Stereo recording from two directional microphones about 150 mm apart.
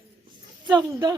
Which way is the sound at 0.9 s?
25° right (ahead or behind).